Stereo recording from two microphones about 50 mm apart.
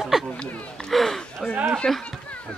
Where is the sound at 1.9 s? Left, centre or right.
Centre.